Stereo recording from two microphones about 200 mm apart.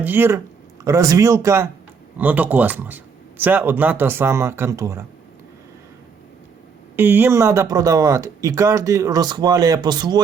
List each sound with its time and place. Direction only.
0.0 s speech: 10° right (ahead or behind)
6.9 s speech: 10° right (ahead or behind)